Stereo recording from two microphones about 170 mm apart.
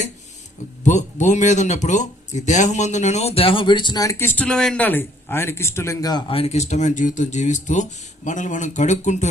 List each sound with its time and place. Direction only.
0.9 s speech: 45° left (ahead or behind)